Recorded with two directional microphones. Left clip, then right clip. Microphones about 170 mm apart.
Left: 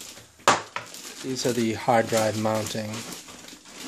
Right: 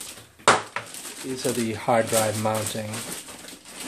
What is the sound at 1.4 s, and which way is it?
Speech, 35° left (ahead or behind).